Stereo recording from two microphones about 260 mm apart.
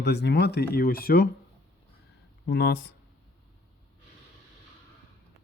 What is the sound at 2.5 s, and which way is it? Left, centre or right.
Speech, left.